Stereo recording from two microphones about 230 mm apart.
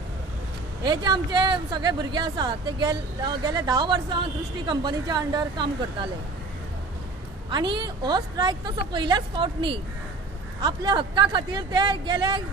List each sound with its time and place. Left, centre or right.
0.8 s speech: centre
7.5 s a woman's voice: centre